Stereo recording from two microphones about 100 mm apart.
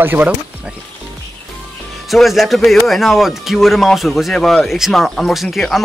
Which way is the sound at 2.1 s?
Centre (ahead or behind).